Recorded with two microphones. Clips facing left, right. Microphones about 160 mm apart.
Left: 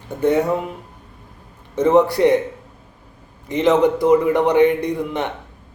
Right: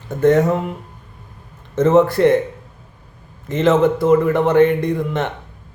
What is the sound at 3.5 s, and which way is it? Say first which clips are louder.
A man's voice: right 1 dB; 15° left (ahead or behind).